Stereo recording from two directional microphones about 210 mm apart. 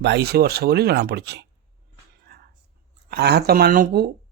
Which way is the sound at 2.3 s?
45° right (ahead or behind).